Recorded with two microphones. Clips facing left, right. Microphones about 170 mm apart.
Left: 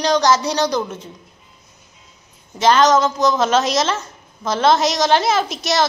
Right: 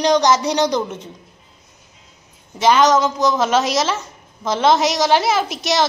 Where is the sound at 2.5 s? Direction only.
10° right (ahead or behind).